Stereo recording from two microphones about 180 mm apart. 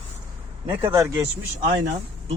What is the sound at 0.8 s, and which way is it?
Speech, 25° right (ahead or behind).